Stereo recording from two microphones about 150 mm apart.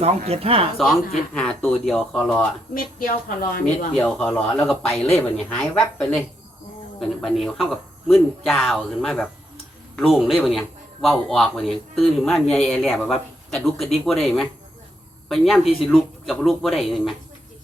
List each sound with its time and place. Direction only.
0.0 s speech: 40° right (ahead or behind)
0.8 s a man's voice: centre (ahead or behind)
2.7 s a woman's voice: 70° left (ahead or behind)
3.9 s a man's voice: 5° left (ahead or behind)